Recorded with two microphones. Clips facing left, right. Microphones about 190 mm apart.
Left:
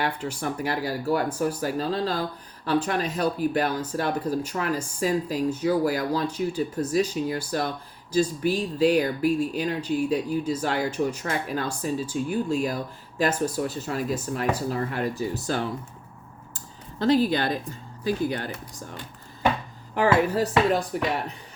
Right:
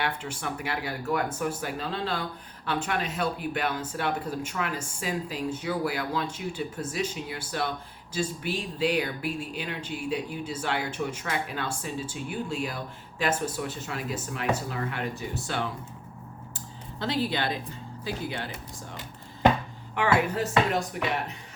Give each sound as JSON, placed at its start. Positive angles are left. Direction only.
{"t": 0.0, "sound": "speech", "side_deg": 35}
{"t": 17.0, "sound": "speech", "side_deg": 45}
{"t": 20.0, "sound": "speech", "side_deg": 35}